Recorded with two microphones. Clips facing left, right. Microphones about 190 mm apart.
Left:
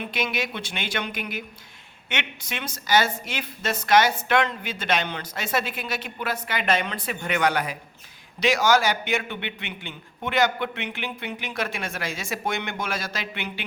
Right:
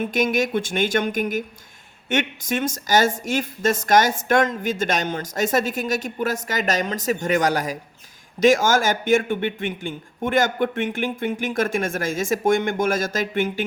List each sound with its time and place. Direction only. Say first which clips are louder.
0.0 s a woman's voice: right 8 dB; 45° right (ahead or behind)